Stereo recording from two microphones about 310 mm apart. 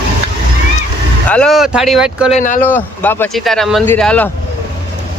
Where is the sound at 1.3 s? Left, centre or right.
Centre.